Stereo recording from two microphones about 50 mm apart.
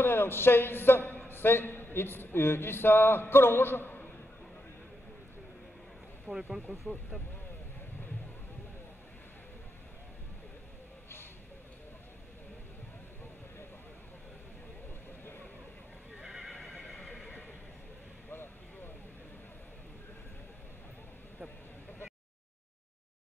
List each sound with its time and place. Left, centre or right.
0.0 s speech: left
6.3 s speech: centre
16.2 s neigh: centre
18.3 s vehicle: left